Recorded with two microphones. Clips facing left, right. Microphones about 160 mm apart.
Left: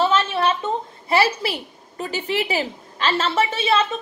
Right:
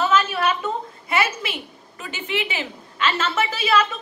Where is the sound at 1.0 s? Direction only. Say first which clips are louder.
Left 5 dB; 30° left (ahead or behind).